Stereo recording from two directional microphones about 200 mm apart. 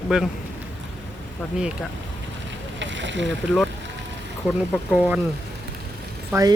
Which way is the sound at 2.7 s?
65° right (ahead or behind).